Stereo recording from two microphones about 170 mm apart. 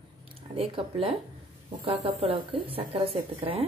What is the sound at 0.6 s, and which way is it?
Speech, 35° right (ahead or behind).